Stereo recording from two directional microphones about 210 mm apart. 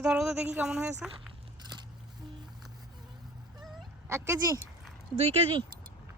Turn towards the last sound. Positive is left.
turn(degrees=-25)  # may be behind; listen again after turning